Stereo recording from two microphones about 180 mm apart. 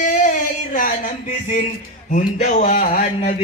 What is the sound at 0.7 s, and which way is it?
Speech, 50° left (ahead or behind).